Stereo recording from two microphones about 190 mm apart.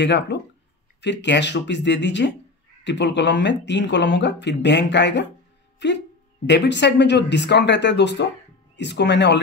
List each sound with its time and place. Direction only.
0.0 s speech: 65° left (ahead or behind)